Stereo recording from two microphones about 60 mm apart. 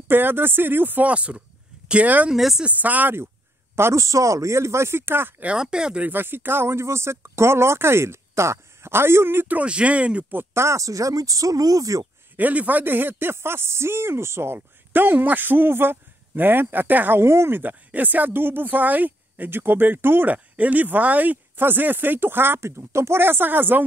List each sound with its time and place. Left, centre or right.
0.1 s speech: right
2.3 s speech: centre
2.6 s speech: right
3.7 s a man's voice: right
4.0 s speech: right
5.6 s speech: centre
6.0 s speech: right
9.5 s speech: right
10.3 s speech: right
12.4 s speech: right
17.2 s speech: right
17.6 s speech: right
20.2 s speech: right